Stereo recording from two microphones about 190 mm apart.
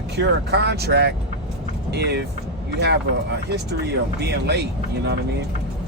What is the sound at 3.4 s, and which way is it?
Speech, 60° right (ahead or behind).